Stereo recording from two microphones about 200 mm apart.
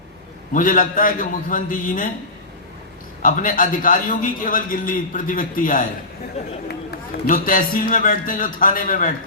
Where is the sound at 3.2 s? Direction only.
45° left (ahead or behind).